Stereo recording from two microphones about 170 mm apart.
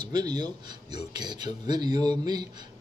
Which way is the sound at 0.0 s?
25° right (ahead or behind).